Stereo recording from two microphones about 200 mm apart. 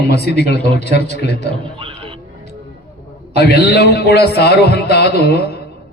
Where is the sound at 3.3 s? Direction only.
55° left (ahead or behind).